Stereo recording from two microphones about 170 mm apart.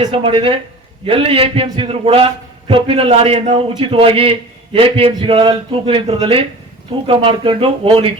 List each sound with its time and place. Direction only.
0.0 s a man's voice: 30° right (ahead or behind)